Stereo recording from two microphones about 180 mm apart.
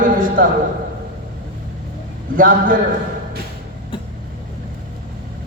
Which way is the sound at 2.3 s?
50° right (ahead or behind).